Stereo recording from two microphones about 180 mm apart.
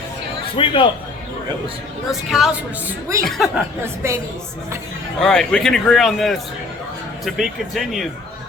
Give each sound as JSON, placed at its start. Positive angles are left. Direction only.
{"t": 0.5, "sound": "a man's voice", "side_deg": 30}
{"t": 2.0, "sound": "a man's voice", "side_deg": 0}
{"t": 4.0, "sound": "a woman's voice", "side_deg": -15}
{"t": 5.2, "sound": "a man's voice", "side_deg": 5}